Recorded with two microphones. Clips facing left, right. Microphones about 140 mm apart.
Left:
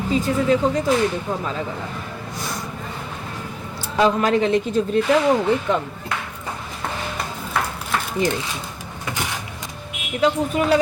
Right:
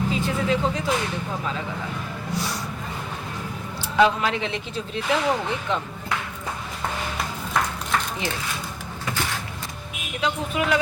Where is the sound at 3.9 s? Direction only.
40° left (ahead or behind).